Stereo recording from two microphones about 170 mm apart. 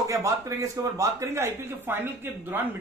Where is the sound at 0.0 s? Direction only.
20° right (ahead or behind).